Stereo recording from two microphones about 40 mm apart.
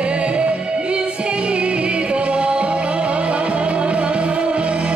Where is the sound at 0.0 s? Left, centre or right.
Right.